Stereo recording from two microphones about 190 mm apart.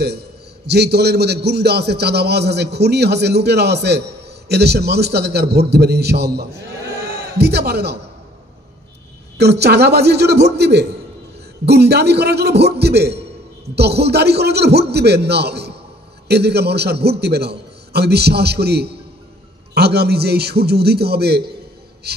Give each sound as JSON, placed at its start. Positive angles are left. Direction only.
{"t": 0.7, "sound": "a man's voice", "side_deg": -60}
{"t": 9.4, "sound": "a man's voice", "side_deg": -60}
{"t": 22.0, "sound": "music", "side_deg": -60}